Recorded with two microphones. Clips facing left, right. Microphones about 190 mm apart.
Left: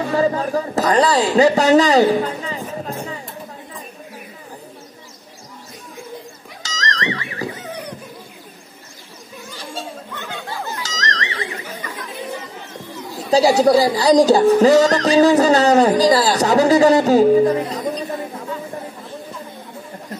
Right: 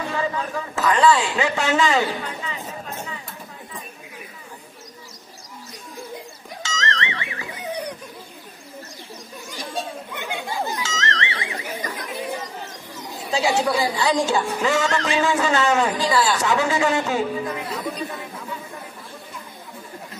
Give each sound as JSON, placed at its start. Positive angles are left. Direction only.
{"t": 0.1, "sound": "speech", "side_deg": 40}
{"t": 6.6, "sound": "music", "side_deg": 35}
{"t": 9.5, "sound": "a sound", "side_deg": -15}
{"t": 10.8, "sound": "bell", "side_deg": 35}
{"t": 11.8, "sound": "chatter", "side_deg": -40}
{"t": 13.3, "sound": "music", "side_deg": 40}